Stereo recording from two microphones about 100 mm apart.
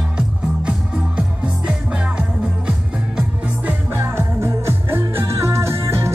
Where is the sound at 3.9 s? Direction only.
25° right (ahead or behind).